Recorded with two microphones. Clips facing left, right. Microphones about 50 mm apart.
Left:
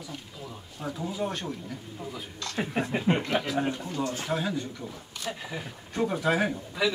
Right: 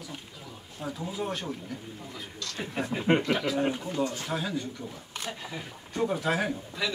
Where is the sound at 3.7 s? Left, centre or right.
Centre.